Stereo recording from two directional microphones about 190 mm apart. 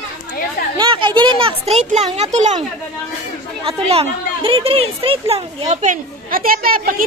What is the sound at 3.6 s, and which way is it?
Speech, 30° right (ahead or behind).